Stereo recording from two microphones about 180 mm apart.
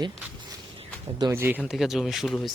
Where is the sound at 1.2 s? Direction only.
15° right (ahead or behind).